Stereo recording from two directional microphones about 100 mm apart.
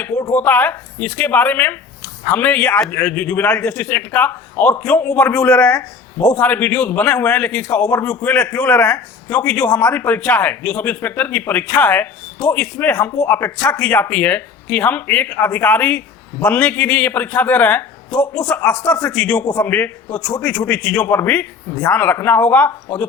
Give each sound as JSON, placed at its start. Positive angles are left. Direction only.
{"t": 0.3, "sound": "a man's voice", "side_deg": 15}